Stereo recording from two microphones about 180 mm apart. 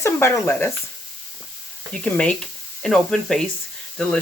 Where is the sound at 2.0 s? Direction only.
5° left (ahead or behind).